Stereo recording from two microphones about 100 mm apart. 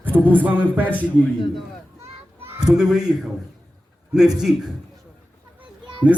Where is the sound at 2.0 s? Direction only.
25° right (ahead or behind).